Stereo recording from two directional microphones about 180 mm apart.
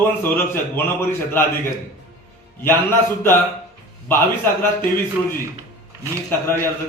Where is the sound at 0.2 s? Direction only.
10° left (ahead or behind).